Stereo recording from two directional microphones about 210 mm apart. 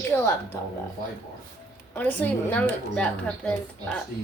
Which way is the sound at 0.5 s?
15° left (ahead or behind).